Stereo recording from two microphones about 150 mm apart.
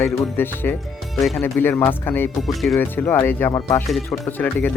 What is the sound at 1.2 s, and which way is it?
Speech, centre (ahead or behind).